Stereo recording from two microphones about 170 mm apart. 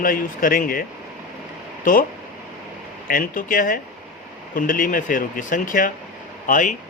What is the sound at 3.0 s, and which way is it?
Speech, 55° left (ahead or behind).